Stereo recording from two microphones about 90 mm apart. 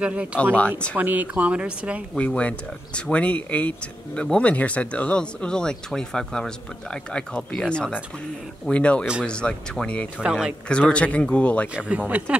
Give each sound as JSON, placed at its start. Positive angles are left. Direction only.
{"t": 0.0, "sound": "speech", "side_deg": -15}
{"t": 0.6, "sound": "speech", "side_deg": 10}
{"t": 0.9, "sound": "speech", "side_deg": -20}
{"t": 2.1, "sound": "speech", "side_deg": 15}
{"t": 11.7, "sound": "speech", "side_deg": -10}